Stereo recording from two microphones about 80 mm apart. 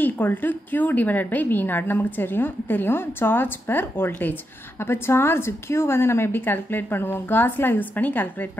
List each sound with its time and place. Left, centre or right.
0.0 s a woman's voice: left